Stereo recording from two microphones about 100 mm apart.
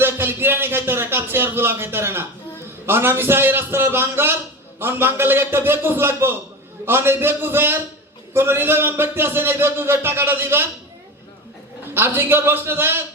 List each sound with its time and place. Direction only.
0.0 s speech: 20° right (ahead or behind)
11.9 s speech: 20° right (ahead or behind)